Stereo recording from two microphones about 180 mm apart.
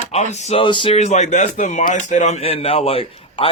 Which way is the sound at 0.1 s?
40° left (ahead or behind).